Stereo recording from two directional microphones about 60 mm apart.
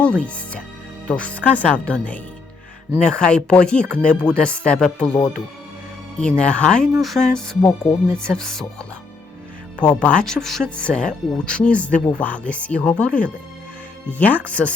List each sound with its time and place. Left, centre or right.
0.0 s speech: centre
7.0 s music: centre
7.3 s speech: centre
9.8 s speech: centre
10.2 s speech: centre
10.8 s speech: centre